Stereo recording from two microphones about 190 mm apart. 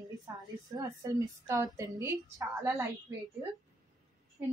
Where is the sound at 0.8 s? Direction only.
15° right (ahead or behind).